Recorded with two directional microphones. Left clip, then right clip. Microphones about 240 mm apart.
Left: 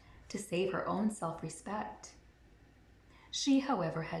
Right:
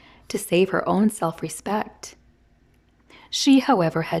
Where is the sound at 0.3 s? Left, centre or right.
Right.